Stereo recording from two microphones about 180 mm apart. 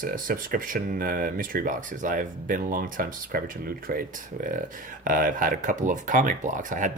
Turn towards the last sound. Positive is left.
turn(degrees=-45)  # may be behind; listen again after turning